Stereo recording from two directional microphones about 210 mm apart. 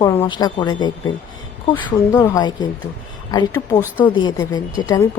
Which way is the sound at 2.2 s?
15° left (ahead or behind).